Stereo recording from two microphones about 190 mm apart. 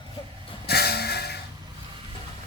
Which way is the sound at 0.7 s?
55° left (ahead or behind).